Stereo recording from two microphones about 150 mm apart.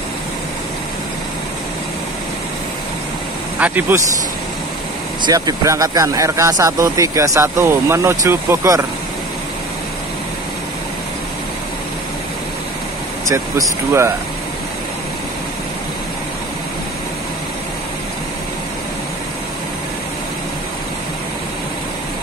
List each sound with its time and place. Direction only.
3.5 s speech: 10° right (ahead or behind)
5.2 s speech: 25° right (ahead or behind)
13.3 s speech: 20° right (ahead or behind)